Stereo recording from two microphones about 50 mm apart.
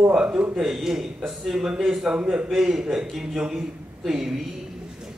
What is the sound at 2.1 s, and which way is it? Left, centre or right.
A man's voice, centre.